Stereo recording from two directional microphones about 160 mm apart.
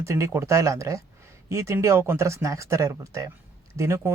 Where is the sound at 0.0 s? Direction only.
15° right (ahead or behind).